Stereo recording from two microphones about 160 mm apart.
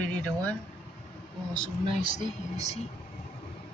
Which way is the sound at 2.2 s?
45° left (ahead or behind).